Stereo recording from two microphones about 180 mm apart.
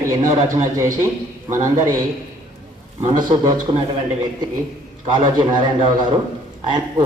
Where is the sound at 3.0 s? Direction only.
25° right (ahead or behind).